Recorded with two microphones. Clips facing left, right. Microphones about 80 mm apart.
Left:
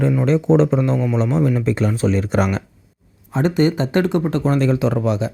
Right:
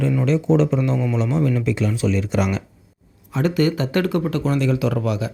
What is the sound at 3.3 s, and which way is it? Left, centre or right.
Speech, left.